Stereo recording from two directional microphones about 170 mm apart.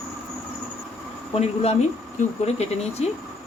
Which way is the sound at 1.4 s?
40° left (ahead or behind).